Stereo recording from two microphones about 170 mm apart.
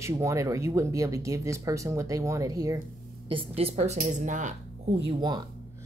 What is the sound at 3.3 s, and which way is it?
A woman's voice, 35° right (ahead or behind).